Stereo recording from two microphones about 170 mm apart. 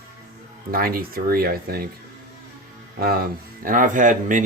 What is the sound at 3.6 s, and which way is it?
Speech, 55° right (ahead or behind).